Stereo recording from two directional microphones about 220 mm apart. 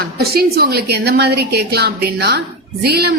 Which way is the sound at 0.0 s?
45° right (ahead or behind).